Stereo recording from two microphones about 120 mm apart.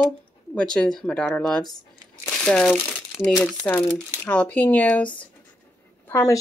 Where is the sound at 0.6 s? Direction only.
5° left (ahead or behind).